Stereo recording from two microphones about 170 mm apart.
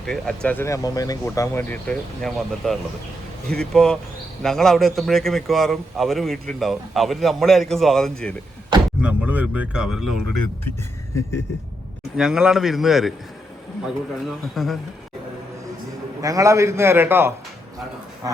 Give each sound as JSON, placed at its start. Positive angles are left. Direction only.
{"t": 0.0, "sound": "a man's voice", "side_deg": 5}
{"t": 9.0, "sound": "speech", "side_deg": -10}
{"t": 12.1, "sound": "a man's voice", "side_deg": -5}
{"t": 16.2, "sound": "speech", "side_deg": -20}